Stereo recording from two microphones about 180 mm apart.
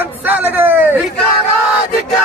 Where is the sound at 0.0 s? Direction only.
10° right (ahead or behind).